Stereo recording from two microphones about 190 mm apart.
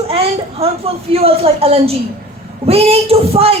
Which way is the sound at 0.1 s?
30° right (ahead or behind).